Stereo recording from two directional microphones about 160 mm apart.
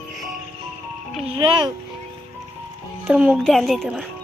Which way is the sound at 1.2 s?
30° right (ahead or behind).